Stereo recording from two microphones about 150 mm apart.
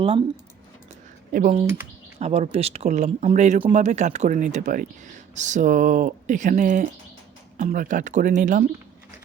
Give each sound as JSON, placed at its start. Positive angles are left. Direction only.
{"t": 0.0, "sound": "speech", "side_deg": -35}
{"t": 1.3, "sound": "speech", "side_deg": -70}
{"t": 2.1, "sound": "speech", "side_deg": -45}